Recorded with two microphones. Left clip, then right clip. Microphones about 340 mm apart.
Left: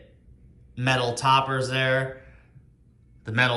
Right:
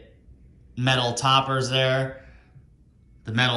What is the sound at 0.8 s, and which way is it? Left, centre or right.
A man's voice, centre.